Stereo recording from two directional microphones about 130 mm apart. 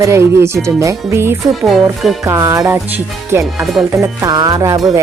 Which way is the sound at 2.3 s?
20° right (ahead or behind).